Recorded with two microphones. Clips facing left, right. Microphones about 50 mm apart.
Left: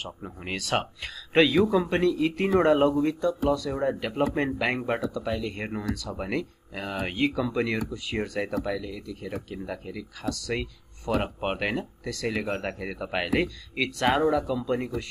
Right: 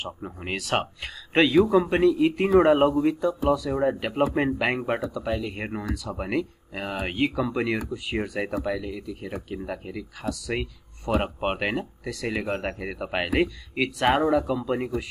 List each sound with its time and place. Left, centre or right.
0.0 s speech: centre
5.0 s speech: centre
5.3 s speech: centre
8.6 s speech: centre